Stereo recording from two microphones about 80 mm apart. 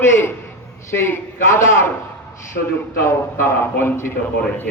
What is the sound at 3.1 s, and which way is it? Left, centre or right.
A man's voice, left.